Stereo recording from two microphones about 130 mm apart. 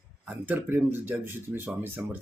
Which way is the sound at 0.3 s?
15° right (ahead or behind).